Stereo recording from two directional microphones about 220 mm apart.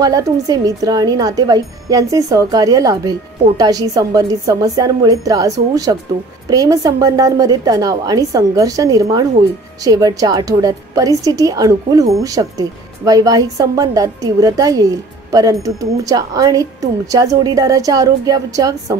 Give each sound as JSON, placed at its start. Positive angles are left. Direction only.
{"t": 0.0, "sound": "speech", "side_deg": -15}